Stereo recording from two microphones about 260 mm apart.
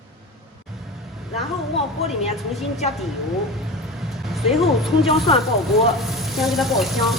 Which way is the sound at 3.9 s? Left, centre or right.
Centre.